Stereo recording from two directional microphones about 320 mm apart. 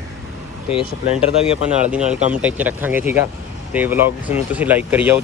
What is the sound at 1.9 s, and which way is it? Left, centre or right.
Speech, centre.